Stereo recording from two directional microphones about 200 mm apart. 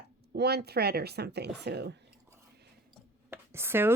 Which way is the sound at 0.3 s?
55° right (ahead or behind).